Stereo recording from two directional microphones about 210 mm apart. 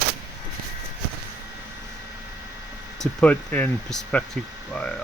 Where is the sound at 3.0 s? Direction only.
5° left (ahead or behind).